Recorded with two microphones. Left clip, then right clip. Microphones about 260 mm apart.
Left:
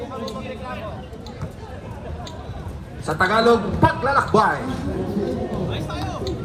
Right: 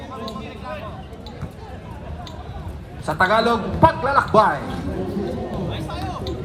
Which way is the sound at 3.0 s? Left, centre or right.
Right.